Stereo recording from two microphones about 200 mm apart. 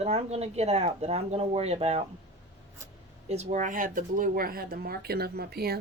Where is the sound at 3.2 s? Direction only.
35° right (ahead or behind).